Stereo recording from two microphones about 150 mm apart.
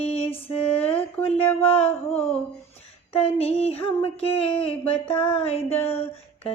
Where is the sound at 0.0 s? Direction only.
40° left (ahead or behind).